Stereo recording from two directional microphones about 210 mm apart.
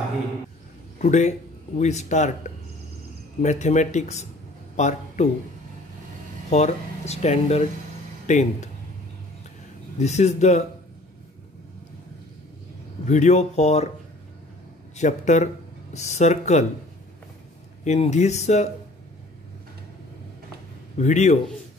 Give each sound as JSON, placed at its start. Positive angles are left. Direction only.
{"t": 0.9, "sound": "speech", "side_deg": 35}
{"t": 6.5, "sound": "speech", "side_deg": 30}
{"t": 9.9, "sound": "speech", "side_deg": 30}
{"t": 13.0, "sound": "speech", "side_deg": 35}
{"t": 15.0, "sound": "speech", "side_deg": 35}
{"t": 17.8, "sound": "speech", "side_deg": 30}
{"t": 21.0, "sound": "speech", "side_deg": 35}